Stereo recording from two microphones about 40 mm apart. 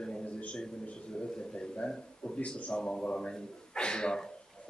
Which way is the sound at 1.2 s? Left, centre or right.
Left.